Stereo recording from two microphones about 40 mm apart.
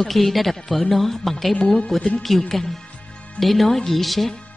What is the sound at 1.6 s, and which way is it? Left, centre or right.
Speech, left.